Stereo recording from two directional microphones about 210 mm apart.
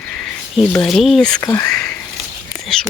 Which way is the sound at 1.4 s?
15° left (ahead or behind).